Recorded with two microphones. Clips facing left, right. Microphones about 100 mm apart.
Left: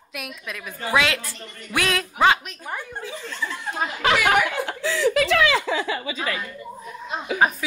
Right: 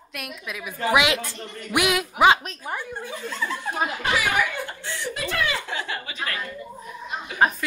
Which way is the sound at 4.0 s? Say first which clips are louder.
Left 7 dB; 90° left.